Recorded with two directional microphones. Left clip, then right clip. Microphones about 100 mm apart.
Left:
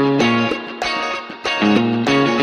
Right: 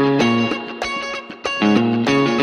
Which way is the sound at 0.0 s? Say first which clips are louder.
Left 1 dB; centre (ahead or behind).